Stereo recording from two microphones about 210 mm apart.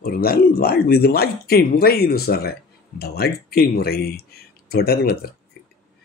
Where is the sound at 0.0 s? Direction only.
45° left (ahead or behind).